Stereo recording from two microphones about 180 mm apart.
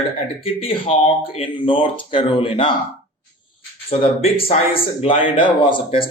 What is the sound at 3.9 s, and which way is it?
A man's voice, 35° left (ahead or behind).